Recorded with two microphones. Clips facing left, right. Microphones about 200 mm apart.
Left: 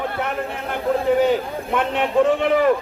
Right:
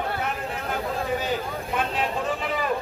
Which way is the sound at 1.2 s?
65° left (ahead or behind).